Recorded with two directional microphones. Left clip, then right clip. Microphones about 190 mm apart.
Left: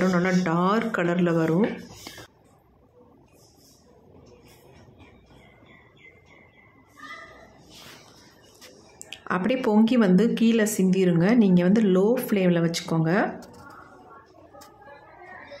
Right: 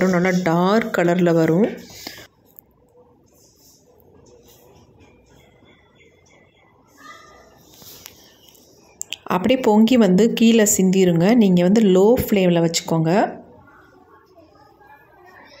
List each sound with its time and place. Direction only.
0.0 s a woman's voice: 20° right (ahead or behind)
8.9 s a woman's voice: 20° right (ahead or behind)